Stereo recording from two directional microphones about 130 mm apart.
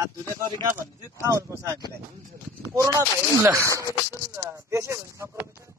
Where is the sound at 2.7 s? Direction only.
25° right (ahead or behind).